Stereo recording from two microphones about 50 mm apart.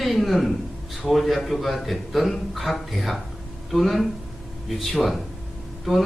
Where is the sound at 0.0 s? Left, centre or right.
Centre.